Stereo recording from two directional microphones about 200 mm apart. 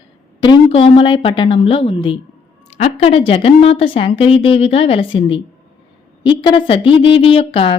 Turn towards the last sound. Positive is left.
turn(degrees=30)  # may be behind; listen again after turning